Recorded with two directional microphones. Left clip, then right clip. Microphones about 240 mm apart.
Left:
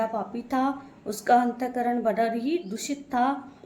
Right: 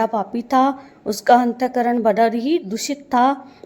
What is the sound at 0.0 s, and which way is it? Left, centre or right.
A woman's voice, right.